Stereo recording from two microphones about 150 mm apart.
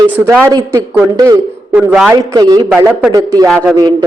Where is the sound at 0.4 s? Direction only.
20° right (ahead or behind).